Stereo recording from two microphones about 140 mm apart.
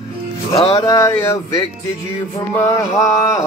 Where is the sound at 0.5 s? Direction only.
45° left (ahead or behind).